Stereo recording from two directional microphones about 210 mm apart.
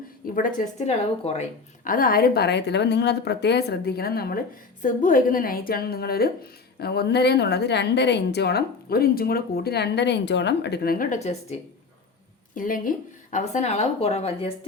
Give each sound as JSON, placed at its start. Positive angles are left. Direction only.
{"t": 0.3, "sound": "a woman's voice", "side_deg": 40}
{"t": 12.5, "sound": "a woman's voice", "side_deg": 40}